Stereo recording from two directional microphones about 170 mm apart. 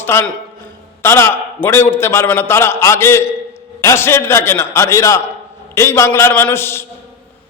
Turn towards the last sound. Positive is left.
turn(degrees=15)  # may be behind; listen again after turning